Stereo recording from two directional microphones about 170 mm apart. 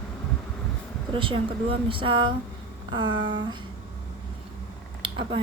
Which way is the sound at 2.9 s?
25° right (ahead or behind).